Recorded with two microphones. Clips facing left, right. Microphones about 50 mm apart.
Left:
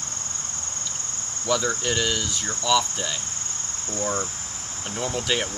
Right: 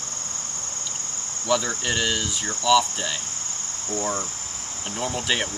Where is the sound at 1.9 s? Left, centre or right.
Centre.